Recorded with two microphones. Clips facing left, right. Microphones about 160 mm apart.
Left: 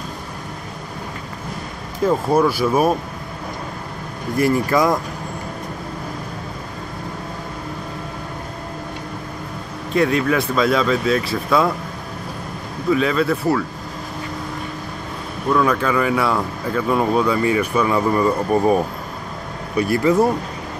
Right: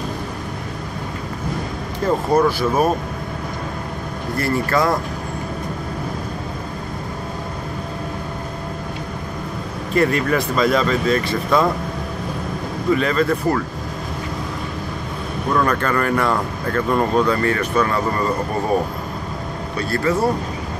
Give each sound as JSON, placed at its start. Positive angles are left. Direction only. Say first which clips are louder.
{"t": 2.0, "sound": "speech", "louder": "even", "side_deg": 10}
{"t": 4.4, "sound": "speech", "louder": "left 3 dB", "side_deg": 15}
{"t": 9.9, "sound": "speech", "louder": "even", "side_deg": 0}
{"t": 12.9, "sound": "speech", "louder": "even", "side_deg": 0}
{"t": 15.5, "sound": "speech", "louder": "left 2 dB", "side_deg": 0}
{"t": 19.8, "sound": "speech", "louder": "left 4 dB", "side_deg": 15}